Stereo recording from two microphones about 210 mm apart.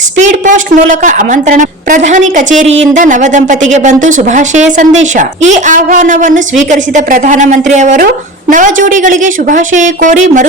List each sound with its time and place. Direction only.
0.2 s speech: 35° right (ahead or behind)